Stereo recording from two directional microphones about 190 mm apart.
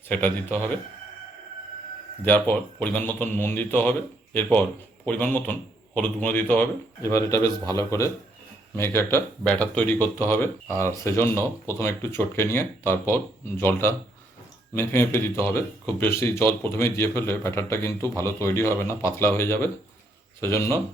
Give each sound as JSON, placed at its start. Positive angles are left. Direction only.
{"t": 0.1, "sound": "speech", "side_deg": 10}
{"t": 2.2, "sound": "speech", "side_deg": 10}
{"t": 5.0, "sound": "speech", "side_deg": 10}